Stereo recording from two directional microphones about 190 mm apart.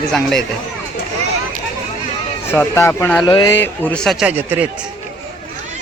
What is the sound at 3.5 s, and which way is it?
Speech, 10° left (ahead or behind).